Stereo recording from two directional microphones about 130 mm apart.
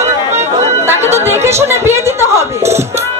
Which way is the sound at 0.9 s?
20° right (ahead or behind).